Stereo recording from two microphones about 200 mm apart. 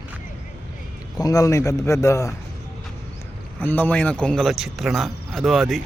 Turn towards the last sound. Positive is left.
turn(degrees=0)  # may be behind; listen again after turning